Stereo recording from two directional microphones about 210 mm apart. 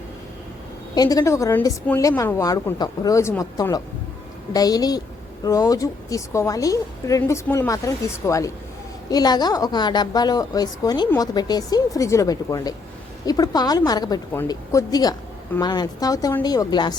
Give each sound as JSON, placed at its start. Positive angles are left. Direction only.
{"t": 0.9, "sound": "a woman's voice", "side_deg": 15}